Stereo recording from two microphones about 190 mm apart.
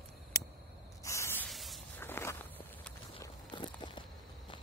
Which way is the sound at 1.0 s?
15° left (ahead or behind).